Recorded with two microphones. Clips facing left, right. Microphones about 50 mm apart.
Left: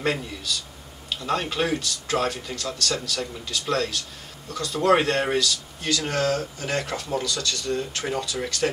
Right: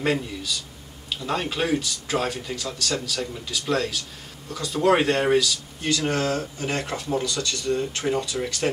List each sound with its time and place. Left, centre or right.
0.0 s a man's voice: centre
5.9 s speech: centre
8.3 s speech: centre